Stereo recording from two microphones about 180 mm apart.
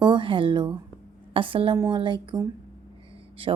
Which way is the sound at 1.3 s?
30° right (ahead or behind).